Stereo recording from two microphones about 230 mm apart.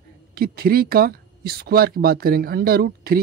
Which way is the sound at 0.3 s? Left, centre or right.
Right.